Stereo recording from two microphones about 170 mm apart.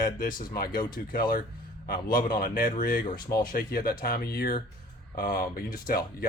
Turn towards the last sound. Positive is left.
turn(degrees=55)  # may be behind; listen again after turning